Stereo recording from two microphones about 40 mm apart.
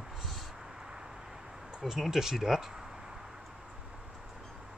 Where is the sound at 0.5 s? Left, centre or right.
Centre.